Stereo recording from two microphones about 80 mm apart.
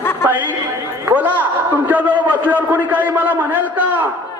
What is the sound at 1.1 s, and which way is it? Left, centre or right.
A man's voice, right.